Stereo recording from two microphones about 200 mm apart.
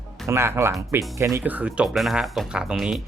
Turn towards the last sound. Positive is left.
turn(degrees=-5)  # may be behind; listen again after turning